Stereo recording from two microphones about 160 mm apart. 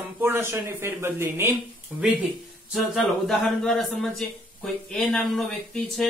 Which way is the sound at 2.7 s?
Centre (ahead or behind).